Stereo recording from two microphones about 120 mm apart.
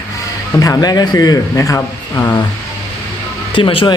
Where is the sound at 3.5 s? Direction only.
45° left (ahead or behind).